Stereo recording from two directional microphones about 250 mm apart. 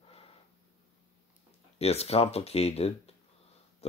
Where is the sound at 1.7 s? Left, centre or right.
Left.